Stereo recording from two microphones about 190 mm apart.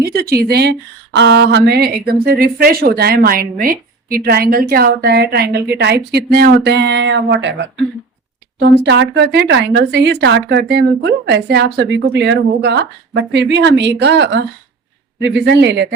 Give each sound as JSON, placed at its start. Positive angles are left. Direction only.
{"t": 0.0, "sound": "a woman's voice", "side_deg": -55}